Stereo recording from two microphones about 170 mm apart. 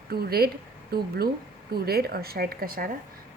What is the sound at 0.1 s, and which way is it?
A woman's voice, 65° right (ahead or behind).